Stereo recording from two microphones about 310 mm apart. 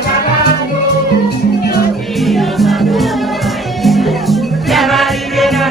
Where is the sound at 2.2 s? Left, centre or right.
Centre.